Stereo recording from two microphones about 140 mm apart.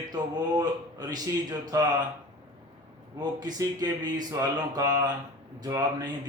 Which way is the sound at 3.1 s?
30° right (ahead or behind).